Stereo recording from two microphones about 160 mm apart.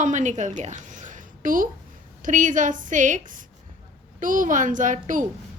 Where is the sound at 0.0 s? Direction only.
50° right (ahead or behind).